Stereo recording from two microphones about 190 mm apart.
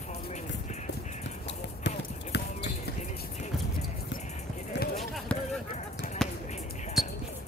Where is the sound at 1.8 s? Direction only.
65° left (ahead or behind).